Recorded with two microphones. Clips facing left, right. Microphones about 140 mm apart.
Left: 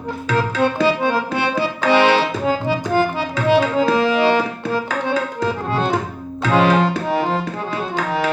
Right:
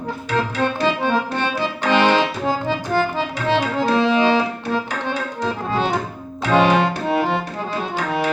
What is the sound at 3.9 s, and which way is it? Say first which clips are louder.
Music: right 4 dB; 5° left (ahead or behind).